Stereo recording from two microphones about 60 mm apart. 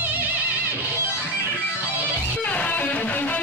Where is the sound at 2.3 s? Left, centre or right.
Left.